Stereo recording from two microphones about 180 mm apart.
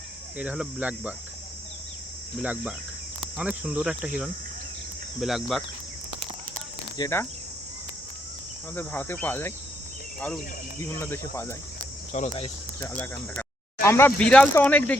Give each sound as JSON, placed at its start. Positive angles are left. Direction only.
{"t": 0.3, "sound": "speech", "side_deg": -5}
{"t": 2.4, "sound": "speech", "side_deg": -10}
{"t": 6.9, "sound": "speech", "side_deg": 15}
{"t": 8.7, "sound": "speech", "side_deg": 10}
{"t": 10.8, "sound": "speech", "side_deg": 15}
{"t": 12.1, "sound": "speech", "side_deg": 40}
{"t": 12.8, "sound": "speech", "side_deg": 10}